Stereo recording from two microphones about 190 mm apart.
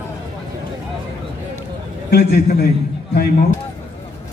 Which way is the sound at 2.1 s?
55° left (ahead or behind).